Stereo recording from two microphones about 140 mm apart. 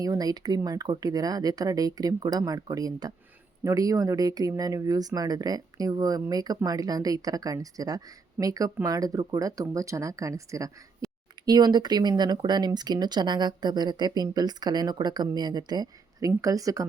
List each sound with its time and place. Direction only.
0.0 s speech: 25° right (ahead or behind)